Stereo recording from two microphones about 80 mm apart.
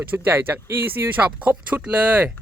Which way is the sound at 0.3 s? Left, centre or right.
Right.